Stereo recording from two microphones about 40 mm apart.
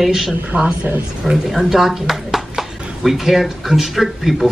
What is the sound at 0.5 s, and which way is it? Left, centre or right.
Speech, right.